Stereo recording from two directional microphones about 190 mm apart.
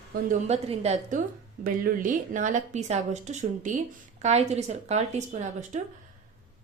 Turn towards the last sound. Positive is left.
turn(degrees=-40)  # may be behind; listen again after turning